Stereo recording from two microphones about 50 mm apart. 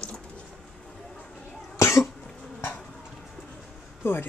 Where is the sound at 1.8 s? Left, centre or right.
Left.